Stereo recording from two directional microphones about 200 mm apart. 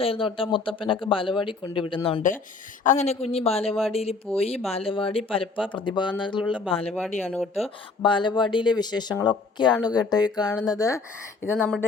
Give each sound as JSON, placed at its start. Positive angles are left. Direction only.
{"t": 0.0, "sound": "speech", "side_deg": 25}
{"t": 7.2, "sound": "speech", "side_deg": 5}
{"t": 8.0, "sound": "speech", "side_deg": 25}